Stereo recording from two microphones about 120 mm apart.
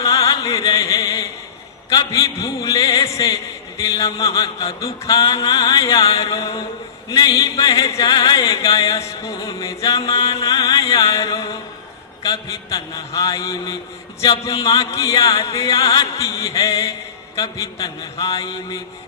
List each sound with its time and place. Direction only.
0.0 s chant: 30° left (ahead or behind)
1.9 s music: 30° left (ahead or behind)
7.1 s music: 30° left (ahead or behind)